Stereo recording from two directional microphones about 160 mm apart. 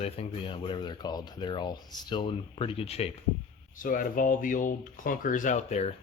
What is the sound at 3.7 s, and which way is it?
Speech, 60° left (ahead or behind).